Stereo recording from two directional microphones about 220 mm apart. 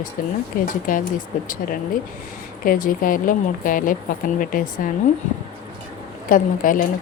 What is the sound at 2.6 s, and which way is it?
A woman's voice, 40° left (ahead or behind).